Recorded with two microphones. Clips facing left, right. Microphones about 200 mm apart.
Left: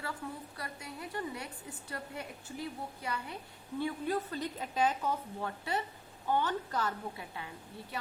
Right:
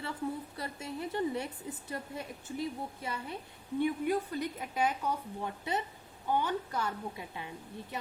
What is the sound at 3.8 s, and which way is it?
A woman's voice, 15° right (ahead or behind).